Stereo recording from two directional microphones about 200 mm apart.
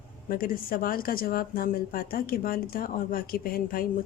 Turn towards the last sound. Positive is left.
turn(degrees=45)  # may be behind; listen again after turning